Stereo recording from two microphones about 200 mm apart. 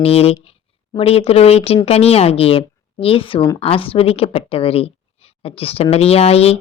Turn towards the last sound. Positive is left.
turn(degrees=30)  # may be behind; listen again after turning